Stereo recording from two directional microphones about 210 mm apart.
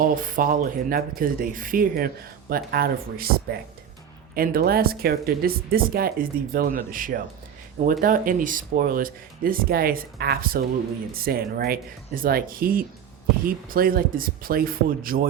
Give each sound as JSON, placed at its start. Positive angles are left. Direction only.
{"t": 0.0, "sound": "speech", "side_deg": -40}